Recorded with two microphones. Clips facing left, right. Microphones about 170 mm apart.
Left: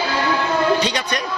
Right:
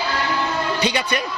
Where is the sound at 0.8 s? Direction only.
10° right (ahead or behind).